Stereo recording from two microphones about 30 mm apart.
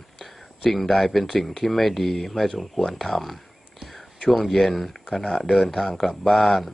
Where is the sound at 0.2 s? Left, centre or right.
Centre.